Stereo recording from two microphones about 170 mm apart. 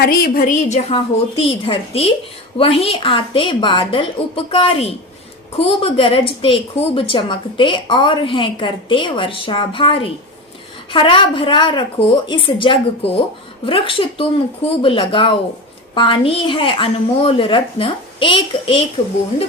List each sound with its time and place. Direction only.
0.0 s a woman's voice: 60° left (ahead or behind); by 18.8 s 30° left (ahead or behind)